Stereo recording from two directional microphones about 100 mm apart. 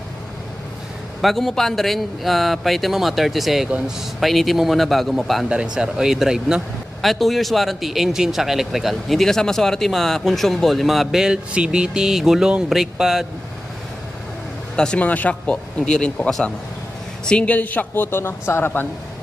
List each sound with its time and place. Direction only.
1.2 s a man's voice: 5° left (ahead or behind)
14.8 s a man's voice: 10° left (ahead or behind)